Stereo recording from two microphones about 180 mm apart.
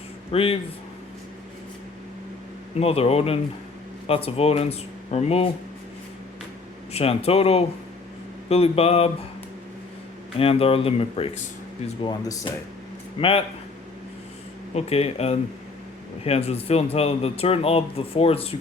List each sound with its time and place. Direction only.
0.3 s speech: 30° left (ahead or behind)
2.7 s speech: 35° left (ahead or behind)
6.9 s speech: 35° left (ahead or behind)
10.3 s speech: 30° left (ahead or behind)
12.0 s speech: 20° left (ahead or behind)
13.1 s speech: 30° left (ahead or behind)
14.7 s speech: 35° left (ahead or behind)